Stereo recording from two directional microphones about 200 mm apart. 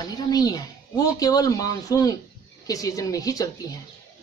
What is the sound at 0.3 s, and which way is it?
A woman's voice, 20° left (ahead or behind).